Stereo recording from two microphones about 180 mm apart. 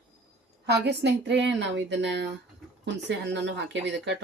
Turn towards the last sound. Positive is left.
turn(degrees=-75)  # may be behind; listen again after turning